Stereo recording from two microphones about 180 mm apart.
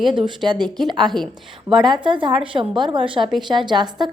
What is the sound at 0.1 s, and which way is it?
A woman's voice, 25° right (ahead or behind).